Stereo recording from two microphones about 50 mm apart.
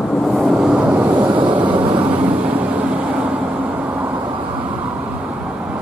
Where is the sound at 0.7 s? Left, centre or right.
Right.